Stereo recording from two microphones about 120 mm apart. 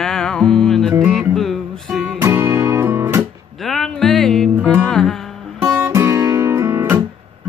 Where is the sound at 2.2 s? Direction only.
20° right (ahead or behind).